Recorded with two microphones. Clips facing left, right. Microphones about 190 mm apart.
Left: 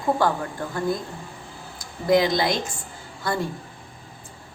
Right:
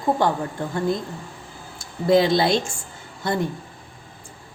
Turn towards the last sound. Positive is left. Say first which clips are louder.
# right 2 dB
turn(degrees=-20)  # may be behind; listen again after turning